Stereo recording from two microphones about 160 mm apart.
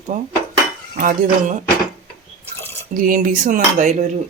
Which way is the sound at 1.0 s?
60° right (ahead or behind).